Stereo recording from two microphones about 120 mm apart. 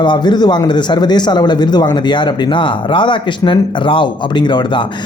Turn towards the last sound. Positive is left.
turn(degrees=40)  # may be behind; listen again after turning